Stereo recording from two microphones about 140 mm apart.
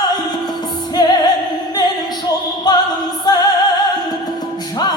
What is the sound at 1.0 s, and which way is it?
Music, 30° left (ahead or behind).